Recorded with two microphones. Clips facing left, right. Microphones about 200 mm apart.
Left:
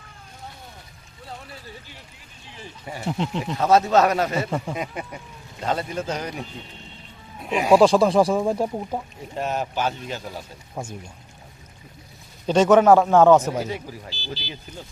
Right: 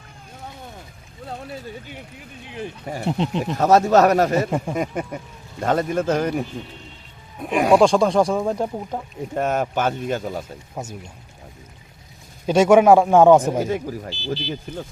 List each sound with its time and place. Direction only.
1.9 s speech: 55° right (ahead or behind)
3.1 s speech: 20° right (ahead or behind)
3.5 s speech: 45° right (ahead or behind)
4.4 s speech: 15° right (ahead or behind)
4.7 s speech: 45° right (ahead or behind)
7.4 s speech: 50° right (ahead or behind)
7.7 s speech: 5° left (ahead or behind)
9.3 s speech: 50° right (ahead or behind)
10.8 s speech: centre (ahead or behind)
12.5 s speech: 10° right (ahead or behind)
13.6 s speech: 50° right (ahead or behind)